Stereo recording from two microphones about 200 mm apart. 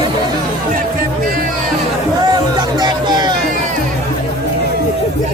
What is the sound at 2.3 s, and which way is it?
Music, 20° right (ahead or behind).